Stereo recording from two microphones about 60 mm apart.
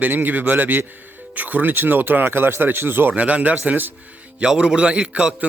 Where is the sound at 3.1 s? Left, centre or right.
Right.